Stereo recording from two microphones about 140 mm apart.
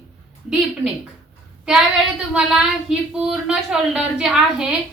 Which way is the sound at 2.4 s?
5° right (ahead or behind).